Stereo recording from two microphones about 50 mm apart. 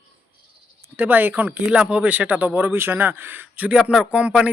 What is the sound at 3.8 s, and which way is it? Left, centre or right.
Speech, centre.